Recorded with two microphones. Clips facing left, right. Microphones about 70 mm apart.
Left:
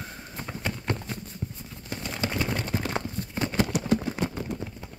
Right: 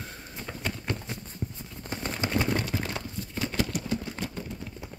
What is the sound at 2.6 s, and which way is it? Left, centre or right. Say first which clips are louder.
Clip-clop: left 3 dB; left.